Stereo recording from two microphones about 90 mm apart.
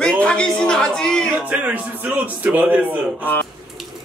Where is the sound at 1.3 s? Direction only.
15° right (ahead or behind).